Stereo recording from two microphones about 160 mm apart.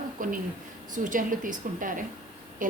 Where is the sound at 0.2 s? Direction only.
60° right (ahead or behind).